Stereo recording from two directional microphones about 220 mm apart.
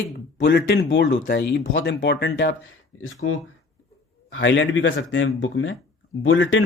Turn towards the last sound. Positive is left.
turn(degrees=60)  # may be behind; listen again after turning